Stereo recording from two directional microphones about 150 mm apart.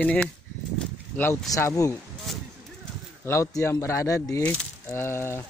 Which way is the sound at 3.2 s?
20° left (ahead or behind).